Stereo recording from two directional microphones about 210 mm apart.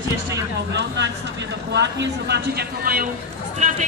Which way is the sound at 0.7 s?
55° right (ahead or behind).